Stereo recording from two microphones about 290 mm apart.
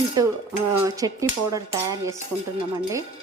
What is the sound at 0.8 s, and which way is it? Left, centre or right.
Speech, centre.